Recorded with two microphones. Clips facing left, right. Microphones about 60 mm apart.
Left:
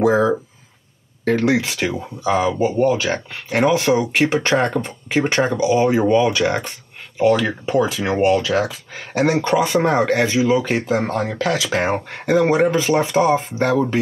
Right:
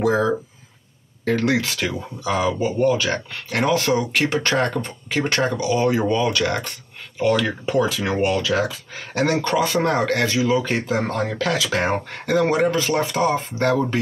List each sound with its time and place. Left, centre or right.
0.0 s speech: left